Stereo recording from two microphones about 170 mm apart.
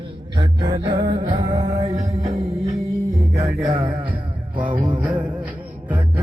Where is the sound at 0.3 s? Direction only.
30° right (ahead or behind).